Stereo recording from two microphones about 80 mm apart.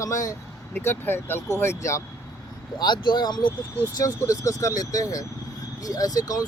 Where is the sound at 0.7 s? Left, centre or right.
Left.